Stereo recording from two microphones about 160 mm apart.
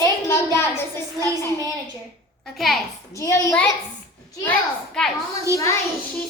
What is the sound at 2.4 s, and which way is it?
Speech, centre (ahead or behind).